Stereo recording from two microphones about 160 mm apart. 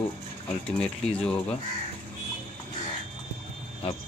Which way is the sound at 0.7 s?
5° left (ahead or behind).